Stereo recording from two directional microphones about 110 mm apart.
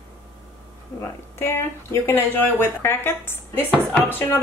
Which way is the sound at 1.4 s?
20° left (ahead or behind).